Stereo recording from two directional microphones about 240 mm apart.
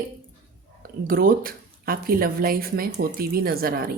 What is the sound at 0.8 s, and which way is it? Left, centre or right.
Speech, right.